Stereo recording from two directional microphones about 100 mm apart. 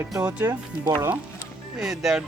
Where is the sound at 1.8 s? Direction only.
5° right (ahead or behind).